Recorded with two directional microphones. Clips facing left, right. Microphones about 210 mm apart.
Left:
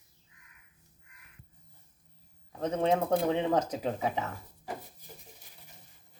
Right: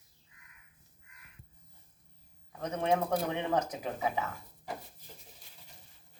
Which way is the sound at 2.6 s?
25° left (ahead or behind).